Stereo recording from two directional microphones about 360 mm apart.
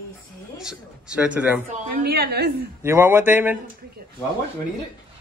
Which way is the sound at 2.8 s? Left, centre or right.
Centre.